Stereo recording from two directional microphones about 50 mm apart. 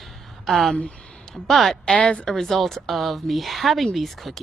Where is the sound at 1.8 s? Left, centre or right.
Left.